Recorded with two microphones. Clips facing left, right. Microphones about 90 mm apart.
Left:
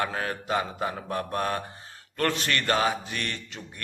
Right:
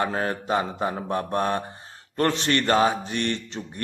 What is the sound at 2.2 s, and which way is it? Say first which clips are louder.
Speech: right 4 dB; 25° right (ahead or behind).